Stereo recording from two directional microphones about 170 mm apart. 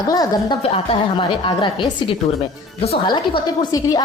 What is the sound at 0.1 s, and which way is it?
A woman's voice, 20° left (ahead or behind).